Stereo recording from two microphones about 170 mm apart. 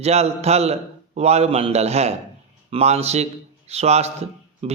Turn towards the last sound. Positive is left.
turn(degrees=-40)  # may be behind; listen again after turning